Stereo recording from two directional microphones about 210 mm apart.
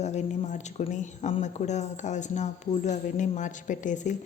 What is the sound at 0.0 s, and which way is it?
Speech, 35° left (ahead or behind).